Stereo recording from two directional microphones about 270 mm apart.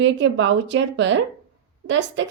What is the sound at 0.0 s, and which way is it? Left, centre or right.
A woman's voice, right.